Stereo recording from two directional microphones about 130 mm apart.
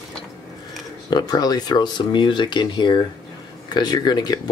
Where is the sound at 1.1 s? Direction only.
30° left (ahead or behind).